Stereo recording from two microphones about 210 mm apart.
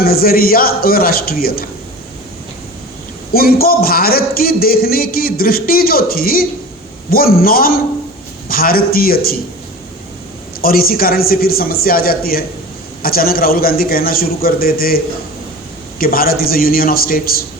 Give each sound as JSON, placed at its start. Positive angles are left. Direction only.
{"t": 0.0, "sound": "a man's voice", "side_deg": 45}
{"t": 3.3, "sound": "a man's voice", "side_deg": 45}
{"t": 10.6, "sound": "a man's voice", "side_deg": 45}